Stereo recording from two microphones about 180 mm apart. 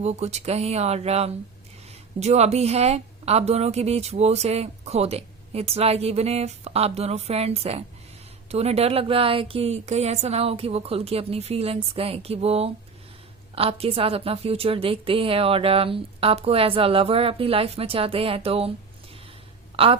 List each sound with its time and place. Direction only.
0.0 s a woman's voice: 35° right (ahead or behind)
19.7 s speech: 30° right (ahead or behind)